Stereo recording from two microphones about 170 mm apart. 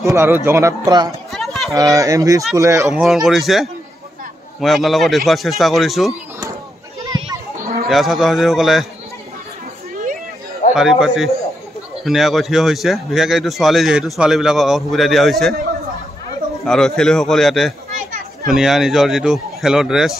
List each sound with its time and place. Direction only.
0.0 s a man's voice: 15° right (ahead or behind)
1.3 s chatter: centre (ahead or behind)
1.7 s a man's voice: 20° right (ahead or behind)
2.9 s speech: centre (ahead or behind)
7.9 s speech: centre (ahead or behind)
10.7 s speech: 5° right (ahead or behind)
16.6 s speech: 5° left (ahead or behind)
17.9 s children playing: 50° right (ahead or behind)
18.5 s speech: centre (ahead or behind)